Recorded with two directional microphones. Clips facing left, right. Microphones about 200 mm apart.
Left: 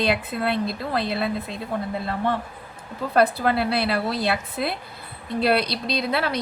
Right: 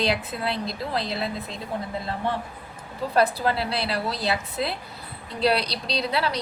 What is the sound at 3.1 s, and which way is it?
A woman's voice, 55° left (ahead or behind).